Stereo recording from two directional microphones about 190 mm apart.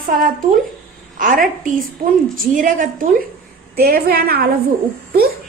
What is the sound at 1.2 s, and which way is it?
A woman's voice, 45° right (ahead or behind).